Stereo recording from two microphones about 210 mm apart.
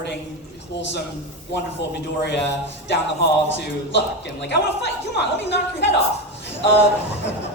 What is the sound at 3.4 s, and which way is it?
Speech, 55° left (ahead or behind).